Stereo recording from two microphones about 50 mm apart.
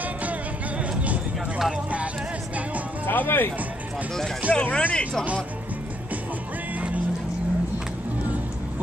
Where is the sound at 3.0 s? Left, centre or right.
Left.